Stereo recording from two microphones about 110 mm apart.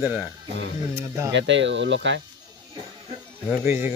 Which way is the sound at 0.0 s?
15° right (ahead or behind).